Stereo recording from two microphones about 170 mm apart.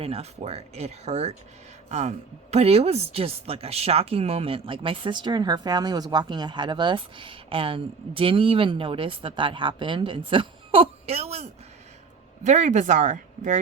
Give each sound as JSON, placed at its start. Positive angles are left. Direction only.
{"t": 0.0, "sound": "a woman's voice", "side_deg": -35}